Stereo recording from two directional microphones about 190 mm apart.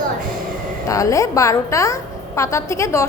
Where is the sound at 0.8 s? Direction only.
15° left (ahead or behind).